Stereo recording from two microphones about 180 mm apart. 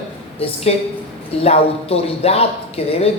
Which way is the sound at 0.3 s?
35° left (ahead or behind).